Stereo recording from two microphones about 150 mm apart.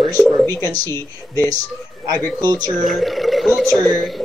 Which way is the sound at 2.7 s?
Centre (ahead or behind).